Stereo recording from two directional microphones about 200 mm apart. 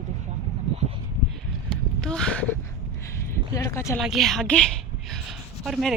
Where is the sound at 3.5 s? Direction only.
15° left (ahead or behind).